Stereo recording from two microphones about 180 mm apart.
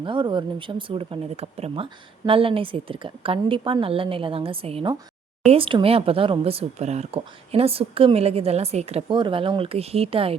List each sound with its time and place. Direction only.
0.0 s speech: 25° right (ahead or behind)